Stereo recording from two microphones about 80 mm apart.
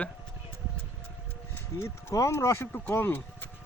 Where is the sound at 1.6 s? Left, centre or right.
Left.